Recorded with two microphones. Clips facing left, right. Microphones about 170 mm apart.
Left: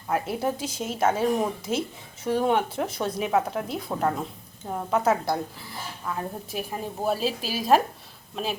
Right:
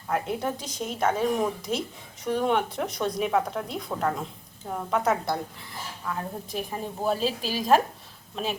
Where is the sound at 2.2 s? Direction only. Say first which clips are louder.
Left 2 dB; 5° left (ahead or behind).